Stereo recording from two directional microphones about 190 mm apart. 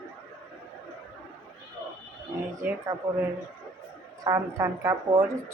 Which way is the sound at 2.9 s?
20° right (ahead or behind).